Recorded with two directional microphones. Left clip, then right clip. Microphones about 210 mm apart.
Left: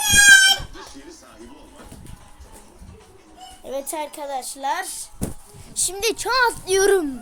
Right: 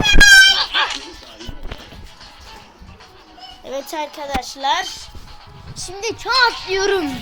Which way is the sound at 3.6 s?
5° left (ahead or behind).